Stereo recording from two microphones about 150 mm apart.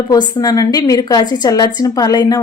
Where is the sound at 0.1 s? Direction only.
30° left (ahead or behind).